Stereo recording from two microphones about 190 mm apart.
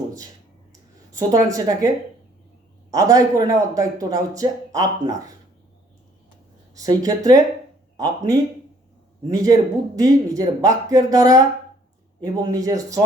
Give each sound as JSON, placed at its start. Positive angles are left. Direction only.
{"t": 1.1, "sound": "speech", "side_deg": -20}
{"t": 2.9, "sound": "speech", "side_deg": -20}
{"t": 6.7, "sound": "a woman's voice", "side_deg": -20}
{"t": 9.3, "sound": "speech", "side_deg": -20}